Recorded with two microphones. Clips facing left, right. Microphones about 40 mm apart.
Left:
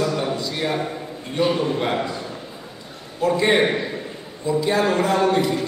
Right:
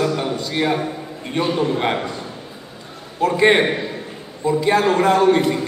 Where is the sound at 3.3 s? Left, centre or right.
Right.